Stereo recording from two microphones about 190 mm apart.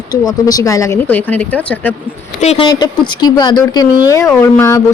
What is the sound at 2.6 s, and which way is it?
A woman's voice, 20° left (ahead or behind).